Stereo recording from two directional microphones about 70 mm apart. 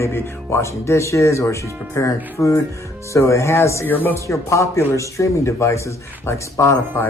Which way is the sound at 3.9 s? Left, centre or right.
Left.